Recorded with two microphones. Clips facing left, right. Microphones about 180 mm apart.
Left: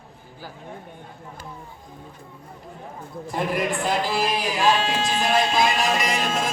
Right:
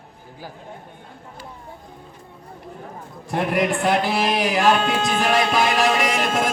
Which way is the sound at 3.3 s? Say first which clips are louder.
Right 4 dB; 70° right (ahead or behind).